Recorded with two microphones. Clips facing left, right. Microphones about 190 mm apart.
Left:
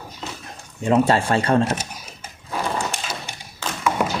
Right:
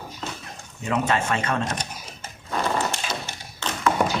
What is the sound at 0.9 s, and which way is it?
Speech, 35° left (ahead or behind).